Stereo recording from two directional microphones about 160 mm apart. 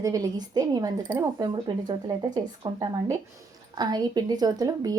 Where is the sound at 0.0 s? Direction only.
25° right (ahead or behind).